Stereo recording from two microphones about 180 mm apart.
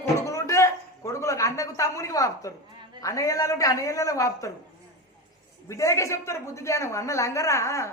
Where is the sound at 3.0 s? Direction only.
20° left (ahead or behind).